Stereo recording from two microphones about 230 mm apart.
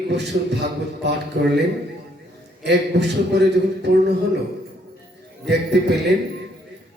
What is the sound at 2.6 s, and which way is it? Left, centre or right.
A man's voice, right.